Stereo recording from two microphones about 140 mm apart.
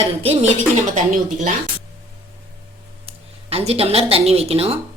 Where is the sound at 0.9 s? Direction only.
65° right (ahead or behind).